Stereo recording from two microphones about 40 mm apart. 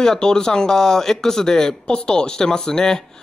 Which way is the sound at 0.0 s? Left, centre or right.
Centre.